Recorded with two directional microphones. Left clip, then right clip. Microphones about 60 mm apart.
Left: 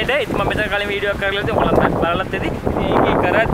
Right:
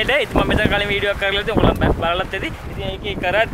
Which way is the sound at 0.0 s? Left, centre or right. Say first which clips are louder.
Right 1 dB; centre.